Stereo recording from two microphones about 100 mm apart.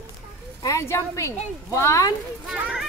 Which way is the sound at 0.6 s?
30° left (ahead or behind).